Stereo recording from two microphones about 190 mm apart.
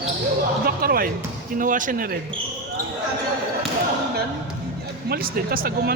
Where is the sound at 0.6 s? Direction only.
50° right (ahead or behind).